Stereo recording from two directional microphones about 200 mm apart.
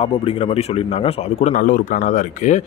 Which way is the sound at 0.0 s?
30° left (ahead or behind).